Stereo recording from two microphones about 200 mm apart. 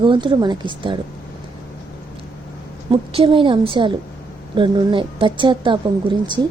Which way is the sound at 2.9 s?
25° right (ahead or behind).